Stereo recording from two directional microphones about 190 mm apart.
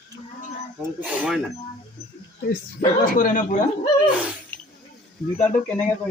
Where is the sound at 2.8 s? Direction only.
45° left (ahead or behind).